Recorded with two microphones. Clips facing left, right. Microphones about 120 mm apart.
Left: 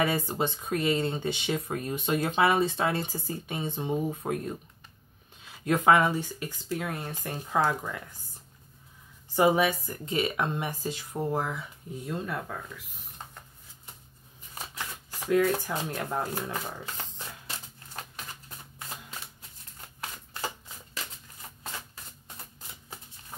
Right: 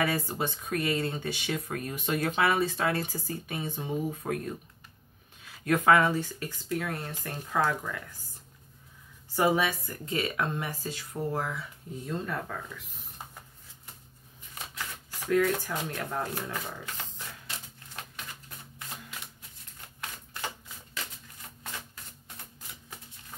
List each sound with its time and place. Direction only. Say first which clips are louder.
0.0 s speech: left 2 dB; 20° left (ahead or behind)
9.3 s speech: left 3 dB; 20° left (ahead or behind)
15.2 s speech: left 1 dB; 20° left (ahead or behind)
20.0 s shuffling cards: left 2 dB; 35° left (ahead or behind)